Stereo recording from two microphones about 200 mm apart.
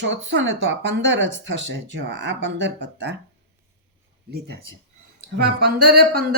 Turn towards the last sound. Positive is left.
turn(degrees=-50)  # may be behind; listen again after turning